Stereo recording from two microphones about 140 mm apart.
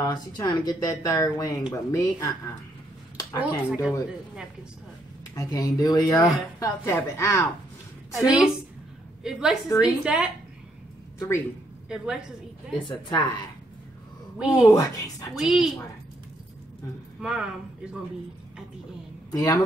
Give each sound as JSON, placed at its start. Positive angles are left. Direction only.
{"t": 0.0, "sound": "speech", "side_deg": 30}
{"t": 3.3, "sound": "speech", "side_deg": -10}
{"t": 5.3, "sound": "speech", "side_deg": 25}
{"t": 8.1, "sound": "a woman's voice", "side_deg": -5}
{"t": 11.1, "sound": "speech", "side_deg": 20}
{"t": 11.9, "sound": "a woman's voice", "side_deg": -5}
{"t": 12.7, "sound": "a woman's voice", "side_deg": 35}
{"t": 14.5, "sound": "speech", "side_deg": 25}
{"t": 15.3, "sound": "a woman's voice", "side_deg": 0}
{"t": 17.2, "sound": "speech", "side_deg": -5}
{"t": 19.3, "sound": "speech", "side_deg": 25}